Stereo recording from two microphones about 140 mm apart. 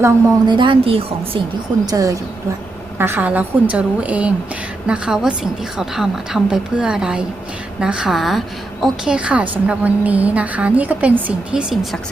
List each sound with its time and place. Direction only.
0.4 s a woman's voice: 35° right (ahead or behind)
1.9 s a woman's voice: 25° right (ahead or behind)
3.0 s a woman's voice: 15° right (ahead or behind)